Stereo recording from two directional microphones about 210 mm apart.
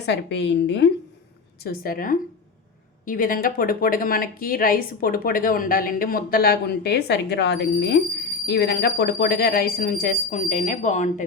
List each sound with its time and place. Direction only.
0.0 s a woman's voice: 55° left (ahead or behind)
1.6 s speech: 45° left (ahead or behind)